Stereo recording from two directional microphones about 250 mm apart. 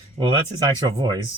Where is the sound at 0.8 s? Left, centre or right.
Centre.